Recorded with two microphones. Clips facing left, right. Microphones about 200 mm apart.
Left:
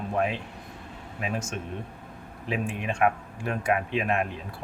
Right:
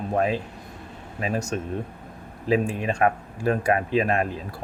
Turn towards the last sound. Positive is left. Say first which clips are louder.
# right 4 dB
turn(degrees=-35)  # may be behind; listen again after turning